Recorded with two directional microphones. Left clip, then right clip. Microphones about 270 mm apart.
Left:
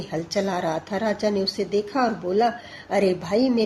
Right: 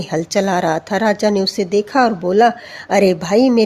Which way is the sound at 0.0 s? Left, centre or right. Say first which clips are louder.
Right 8 dB; right.